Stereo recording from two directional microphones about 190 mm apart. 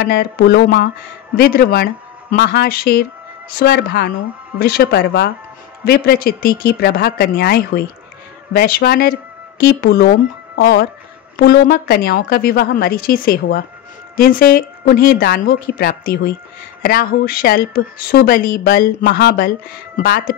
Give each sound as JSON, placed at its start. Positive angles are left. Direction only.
{"t": 0.0, "sound": "speech", "side_deg": 55}